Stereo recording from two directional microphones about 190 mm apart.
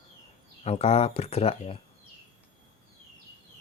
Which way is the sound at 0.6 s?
35° left (ahead or behind).